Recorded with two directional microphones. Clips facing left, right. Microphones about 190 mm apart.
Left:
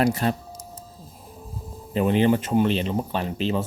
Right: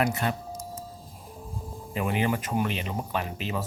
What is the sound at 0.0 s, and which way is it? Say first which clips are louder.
Speech: left 5 dB; 35° left (ahead or behind).